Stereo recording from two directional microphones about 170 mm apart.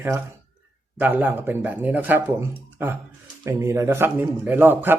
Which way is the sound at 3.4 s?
15° right (ahead or behind).